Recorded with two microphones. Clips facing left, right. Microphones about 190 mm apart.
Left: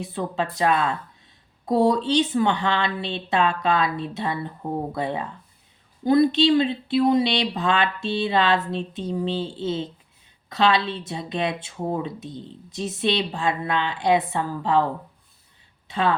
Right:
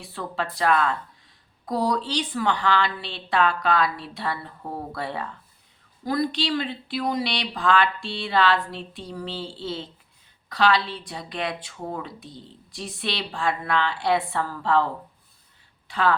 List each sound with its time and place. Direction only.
0.0 s speech: 20° left (ahead or behind)
15.9 s speech: 25° left (ahead or behind)